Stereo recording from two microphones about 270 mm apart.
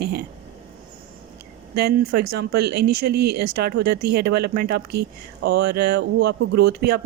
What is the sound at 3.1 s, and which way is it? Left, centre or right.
Speech, right.